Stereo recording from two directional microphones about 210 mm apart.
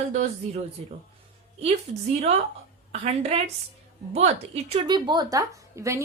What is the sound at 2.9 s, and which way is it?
A woman's voice, 30° right (ahead or behind).